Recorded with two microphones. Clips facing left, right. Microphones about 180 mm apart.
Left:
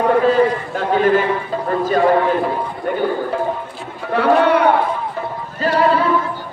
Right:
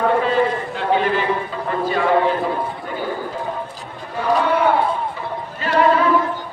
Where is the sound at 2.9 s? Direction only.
60° left (ahead or behind).